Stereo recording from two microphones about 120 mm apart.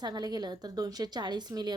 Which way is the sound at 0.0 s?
35° right (ahead or behind).